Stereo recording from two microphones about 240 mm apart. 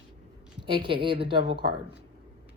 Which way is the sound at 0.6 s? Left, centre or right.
Centre.